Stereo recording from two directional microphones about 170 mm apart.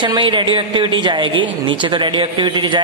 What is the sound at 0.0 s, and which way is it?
Speech, 25° right (ahead or behind).